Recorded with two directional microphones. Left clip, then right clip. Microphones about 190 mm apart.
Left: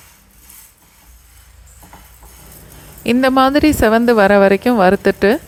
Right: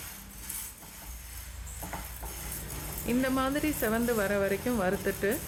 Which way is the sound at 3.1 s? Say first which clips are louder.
Left 17 dB; 50° left (ahead or behind).